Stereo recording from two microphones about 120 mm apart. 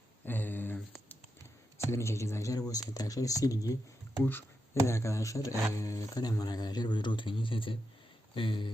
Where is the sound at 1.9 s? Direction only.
20° left (ahead or behind).